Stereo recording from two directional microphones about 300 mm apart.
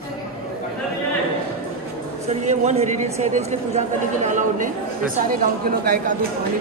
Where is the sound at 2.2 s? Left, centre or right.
Right.